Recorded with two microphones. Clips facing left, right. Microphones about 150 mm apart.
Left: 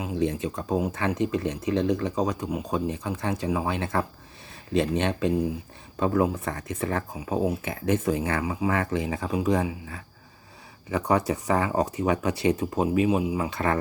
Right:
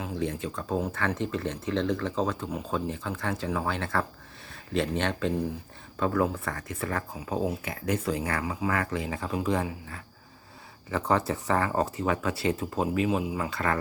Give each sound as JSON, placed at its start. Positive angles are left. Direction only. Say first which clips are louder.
{"t": 0.0, "sound": "speech", "louder": "left 4 dB", "side_deg": 20}